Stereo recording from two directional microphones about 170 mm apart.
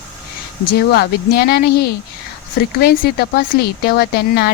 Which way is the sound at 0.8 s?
70° left (ahead or behind).